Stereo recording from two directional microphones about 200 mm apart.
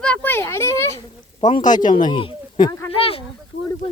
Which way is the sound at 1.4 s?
40° left (ahead or behind).